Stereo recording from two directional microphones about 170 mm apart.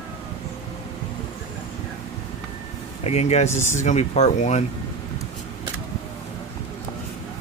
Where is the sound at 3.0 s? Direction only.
40° left (ahead or behind).